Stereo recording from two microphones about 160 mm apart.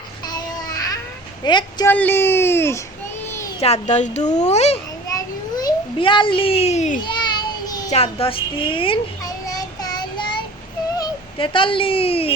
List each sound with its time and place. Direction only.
0.3 s child singing: 25° left (ahead or behind)
1.5 s speech: 30° left (ahead or behind)
1.9 s speech: 10° left (ahead or behind)
3.6 s a child's voice: 45° left (ahead or behind)
5.1 s a sound: 25° left (ahead or behind); by 7.0 s 50° left (ahead or behind)
7.0 s children playing: 30° left (ahead or behind)
7.9 s a sound: 35° left (ahead or behind)
10.9 s speech: 30° left (ahead or behind)